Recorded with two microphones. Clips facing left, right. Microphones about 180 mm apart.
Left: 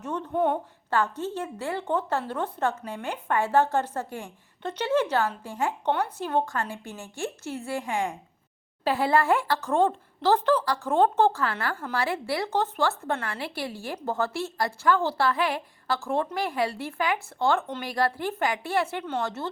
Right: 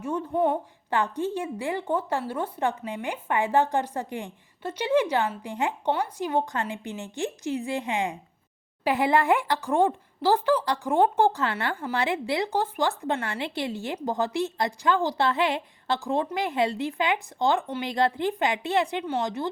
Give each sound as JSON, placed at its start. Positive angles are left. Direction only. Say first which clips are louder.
{"t": 0.0, "sound": "a woman's voice", "louder": "right 1 dB", "side_deg": -10}
{"t": 0.9, "sound": "a woman's voice", "louder": "right 1 dB", "side_deg": -15}